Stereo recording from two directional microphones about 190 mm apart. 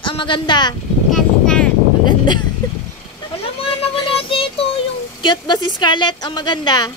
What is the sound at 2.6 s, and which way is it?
Vehicle, 20° left (ahead or behind).